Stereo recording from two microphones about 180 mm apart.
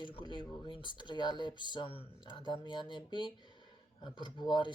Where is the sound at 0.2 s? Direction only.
25° left (ahead or behind).